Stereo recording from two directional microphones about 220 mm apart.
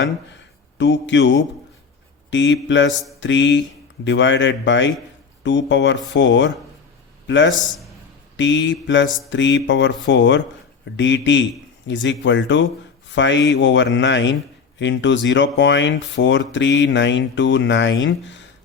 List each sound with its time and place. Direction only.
0.8 s speech: 55° left (ahead or behind)
3.2 s mantra: 55° left (ahead or behind)
4.0 s speech: 55° left (ahead or behind)